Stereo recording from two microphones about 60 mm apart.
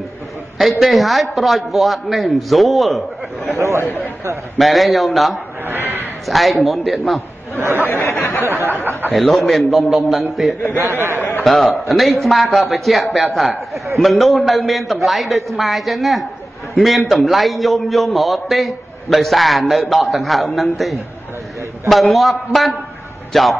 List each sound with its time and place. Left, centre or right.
0.6 s a man's voice: centre
3.5 s speech: right
4.6 s a man's voice: centre
5.7 s a sound: right
6.2 s a man's voice: centre
7.5 s speech: right
8.0 s speech: left
8.5 s speech: right
9.1 s a man's voice: centre